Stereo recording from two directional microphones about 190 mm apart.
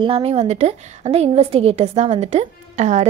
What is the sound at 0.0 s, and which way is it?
A woman's voice, 30° right (ahead or behind).